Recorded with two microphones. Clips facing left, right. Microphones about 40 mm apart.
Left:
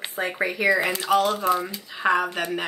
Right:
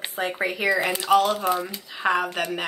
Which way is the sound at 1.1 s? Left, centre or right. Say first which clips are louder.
Right 1 dB; centre.